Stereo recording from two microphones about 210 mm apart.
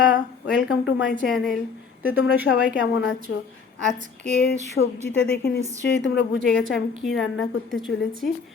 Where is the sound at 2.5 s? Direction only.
60° left (ahead or behind).